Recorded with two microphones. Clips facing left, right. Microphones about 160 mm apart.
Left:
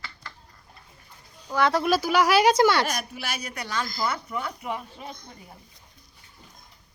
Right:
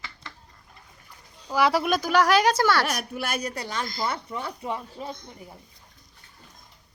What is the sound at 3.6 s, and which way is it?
Speech, 25° right (ahead or behind).